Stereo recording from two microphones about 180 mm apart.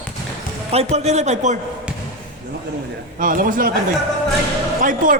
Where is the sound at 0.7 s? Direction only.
35° right (ahead or behind).